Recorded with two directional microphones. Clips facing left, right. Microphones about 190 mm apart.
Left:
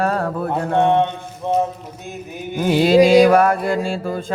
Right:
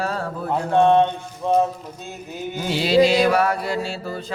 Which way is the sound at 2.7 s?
50° left (ahead or behind).